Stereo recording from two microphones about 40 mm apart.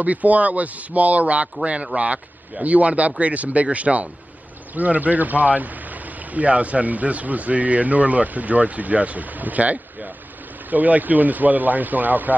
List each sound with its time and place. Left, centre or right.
0.0 s speech: right